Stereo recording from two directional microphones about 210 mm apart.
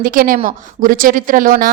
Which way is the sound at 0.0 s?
40° right (ahead or behind).